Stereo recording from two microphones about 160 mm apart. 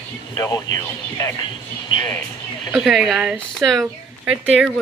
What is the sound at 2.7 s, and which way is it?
A woman's voice, 5° right (ahead or behind).